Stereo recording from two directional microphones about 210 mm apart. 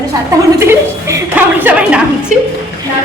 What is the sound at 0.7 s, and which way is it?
A woman's voice, 15° right (ahead or behind).